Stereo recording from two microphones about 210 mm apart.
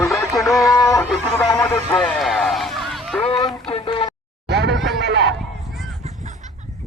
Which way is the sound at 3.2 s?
25° left (ahead or behind).